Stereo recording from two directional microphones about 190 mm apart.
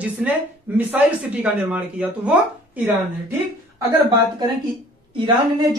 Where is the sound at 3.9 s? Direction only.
20° right (ahead or behind).